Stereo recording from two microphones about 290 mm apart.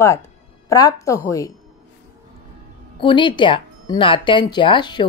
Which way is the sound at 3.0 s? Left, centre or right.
Centre.